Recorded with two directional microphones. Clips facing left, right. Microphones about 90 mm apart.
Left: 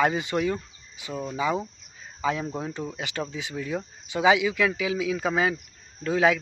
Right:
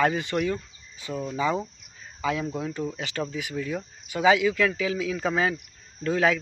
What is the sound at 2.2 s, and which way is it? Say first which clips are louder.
Speech: even; 25° left (ahead or behind).